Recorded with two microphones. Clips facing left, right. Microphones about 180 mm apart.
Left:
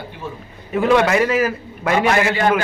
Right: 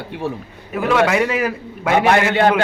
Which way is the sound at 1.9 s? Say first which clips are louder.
Right 2 dB; 70° right (ahead or behind).